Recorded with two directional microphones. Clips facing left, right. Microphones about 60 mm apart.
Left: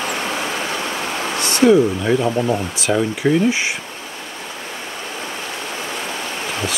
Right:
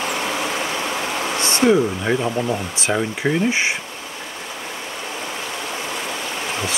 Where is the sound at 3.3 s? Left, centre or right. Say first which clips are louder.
Left 4 dB; centre.